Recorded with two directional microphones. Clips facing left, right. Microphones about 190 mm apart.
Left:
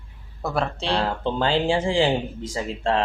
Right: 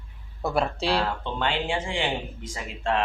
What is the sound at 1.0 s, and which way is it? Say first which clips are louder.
Speech: left 4 dB; 30° left (ahead or behind).